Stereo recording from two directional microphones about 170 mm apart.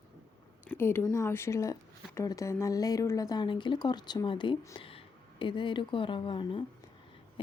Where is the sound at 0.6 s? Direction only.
15° left (ahead or behind).